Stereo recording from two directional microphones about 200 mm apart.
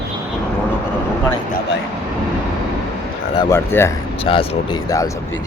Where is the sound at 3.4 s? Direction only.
15° left (ahead or behind).